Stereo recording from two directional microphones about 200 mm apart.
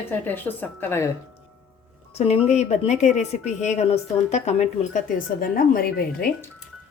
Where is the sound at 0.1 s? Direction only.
10° left (ahead or behind).